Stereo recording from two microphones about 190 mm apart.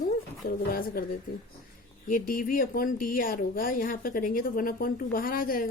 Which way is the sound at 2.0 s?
45° left (ahead or behind).